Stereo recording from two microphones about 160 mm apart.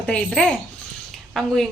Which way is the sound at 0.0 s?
5° left (ahead or behind).